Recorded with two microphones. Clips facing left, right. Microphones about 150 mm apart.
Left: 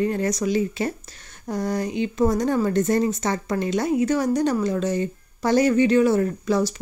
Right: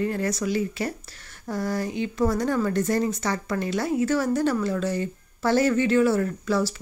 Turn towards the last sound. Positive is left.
turn(degrees=20)  # may be behind; listen again after turning